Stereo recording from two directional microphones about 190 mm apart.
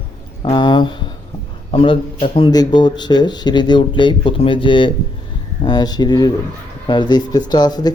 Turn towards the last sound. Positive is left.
turn(degrees=20)  # may be behind; listen again after turning